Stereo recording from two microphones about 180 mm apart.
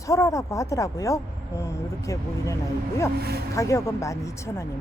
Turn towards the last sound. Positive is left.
turn(degrees=15)  # may be behind; listen again after turning